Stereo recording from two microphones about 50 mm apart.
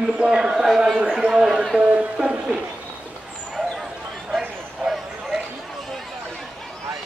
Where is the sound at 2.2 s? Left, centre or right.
Right.